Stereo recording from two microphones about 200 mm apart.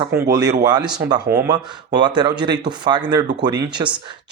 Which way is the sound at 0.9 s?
20° right (ahead or behind).